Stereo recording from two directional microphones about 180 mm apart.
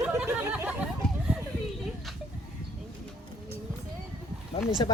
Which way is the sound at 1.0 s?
Centre (ahead or behind).